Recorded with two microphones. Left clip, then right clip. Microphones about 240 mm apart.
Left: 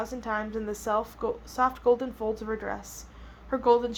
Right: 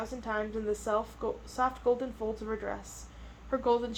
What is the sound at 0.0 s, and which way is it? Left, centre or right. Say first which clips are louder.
A woman's voice: left 3 dB; left.